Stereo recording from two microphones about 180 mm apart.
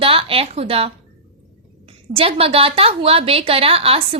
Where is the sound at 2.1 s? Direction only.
30° right (ahead or behind).